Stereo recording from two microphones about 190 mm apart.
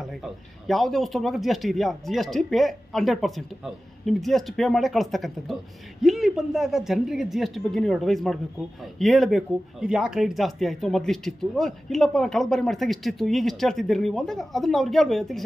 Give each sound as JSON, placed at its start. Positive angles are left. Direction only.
{"t": 0.7, "sound": "speech", "side_deg": 0}